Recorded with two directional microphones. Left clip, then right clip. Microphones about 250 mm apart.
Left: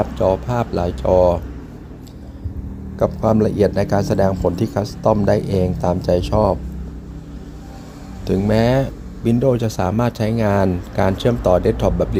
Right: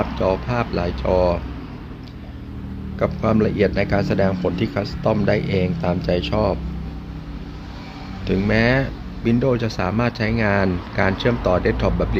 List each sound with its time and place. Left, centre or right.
0.0 s speech: centre
3.0 s speech: centre
8.3 s speech: centre